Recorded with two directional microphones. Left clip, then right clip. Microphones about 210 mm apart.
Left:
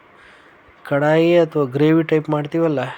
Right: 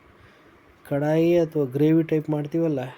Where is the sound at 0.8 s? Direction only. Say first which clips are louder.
Left 6 dB; 5° right (ahead or behind).